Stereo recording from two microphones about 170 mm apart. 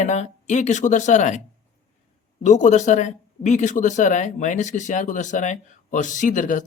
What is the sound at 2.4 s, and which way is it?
Speech, 45° left (ahead or behind).